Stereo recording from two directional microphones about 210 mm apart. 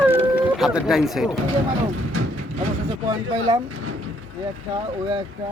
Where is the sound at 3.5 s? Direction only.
20° right (ahead or behind).